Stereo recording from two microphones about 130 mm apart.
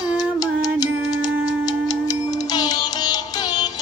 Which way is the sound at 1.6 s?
30° left (ahead or behind).